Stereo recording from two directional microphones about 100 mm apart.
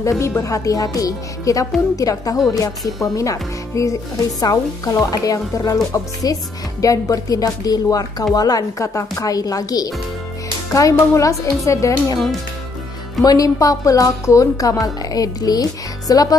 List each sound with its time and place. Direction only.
0.4 s a woman's voice: 35° left (ahead or behind)
13.2 s a woman's voice: 35° left (ahead or behind)